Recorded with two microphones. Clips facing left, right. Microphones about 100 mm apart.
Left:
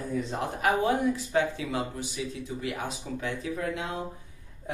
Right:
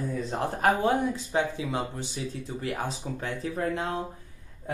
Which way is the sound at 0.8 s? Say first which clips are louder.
Right 1 dB; 25° right (ahead or behind).